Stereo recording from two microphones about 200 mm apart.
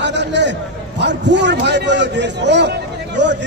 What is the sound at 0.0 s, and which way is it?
A man's voice, 60° right (ahead or behind).